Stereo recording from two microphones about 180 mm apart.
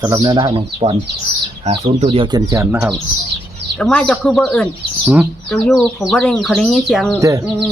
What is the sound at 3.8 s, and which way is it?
Speech, 5° left (ahead or behind).